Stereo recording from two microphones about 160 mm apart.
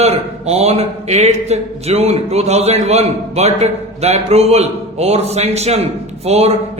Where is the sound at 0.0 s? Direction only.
40° right (ahead or behind).